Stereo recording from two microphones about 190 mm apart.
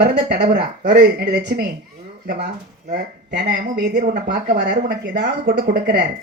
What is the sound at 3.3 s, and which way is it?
Speech, 60° right (ahead or behind).